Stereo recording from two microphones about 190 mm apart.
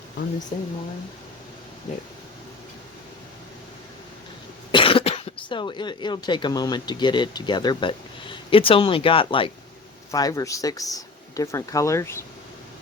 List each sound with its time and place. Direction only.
0.5 s speech: 30° left (ahead or behind)
4.7 s speech: 25° left (ahead or behind)